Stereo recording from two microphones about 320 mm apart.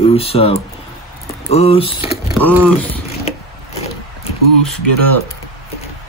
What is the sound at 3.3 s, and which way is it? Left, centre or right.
Wood, centre.